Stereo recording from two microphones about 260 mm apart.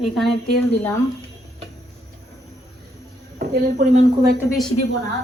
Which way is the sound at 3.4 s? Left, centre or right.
Right.